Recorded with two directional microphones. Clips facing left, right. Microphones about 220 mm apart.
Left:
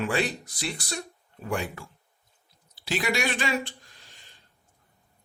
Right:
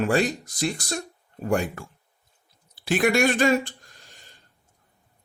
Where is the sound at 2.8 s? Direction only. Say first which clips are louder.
Right 7 dB; 50° right (ahead or behind).